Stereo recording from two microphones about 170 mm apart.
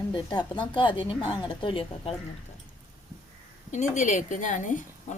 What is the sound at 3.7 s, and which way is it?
A woman's voice, 45° left (ahead or behind).